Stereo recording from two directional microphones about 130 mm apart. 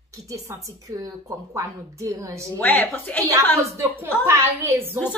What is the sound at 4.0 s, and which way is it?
A woman's voice, 20° right (ahead or behind).